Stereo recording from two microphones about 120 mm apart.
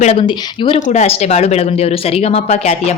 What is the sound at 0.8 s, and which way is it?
Speech, 70° left (ahead or behind).